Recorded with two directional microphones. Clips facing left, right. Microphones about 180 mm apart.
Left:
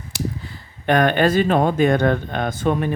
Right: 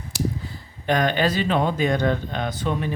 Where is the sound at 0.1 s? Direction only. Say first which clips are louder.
Right 1 dB; 65° left (ahead or behind).